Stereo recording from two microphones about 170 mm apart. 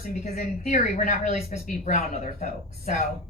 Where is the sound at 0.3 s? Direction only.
40° left (ahead or behind).